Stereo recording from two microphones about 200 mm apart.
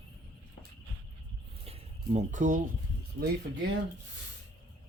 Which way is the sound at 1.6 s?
30° right (ahead or behind).